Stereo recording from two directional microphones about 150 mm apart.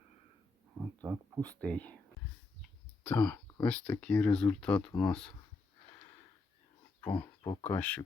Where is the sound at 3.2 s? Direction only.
25° left (ahead or behind).